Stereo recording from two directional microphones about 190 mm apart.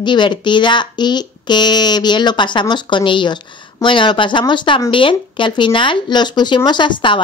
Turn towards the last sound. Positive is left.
turn(degrees=25)  # may be behind; listen again after turning